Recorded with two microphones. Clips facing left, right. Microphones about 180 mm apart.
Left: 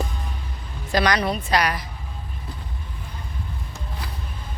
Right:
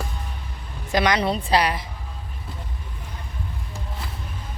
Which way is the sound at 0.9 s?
20° right (ahead or behind).